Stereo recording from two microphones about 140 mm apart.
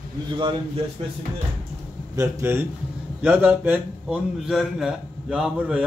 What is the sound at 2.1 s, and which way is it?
A man's voice, 20° right (ahead or behind).